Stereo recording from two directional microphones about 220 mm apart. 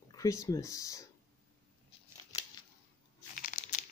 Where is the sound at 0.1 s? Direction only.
15° left (ahead or behind).